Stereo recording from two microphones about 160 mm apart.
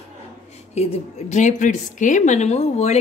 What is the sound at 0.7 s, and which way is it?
A woman's voice, 40° left (ahead or behind).